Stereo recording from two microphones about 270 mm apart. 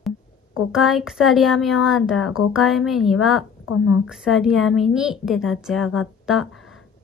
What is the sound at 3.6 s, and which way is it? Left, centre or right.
Speech, left.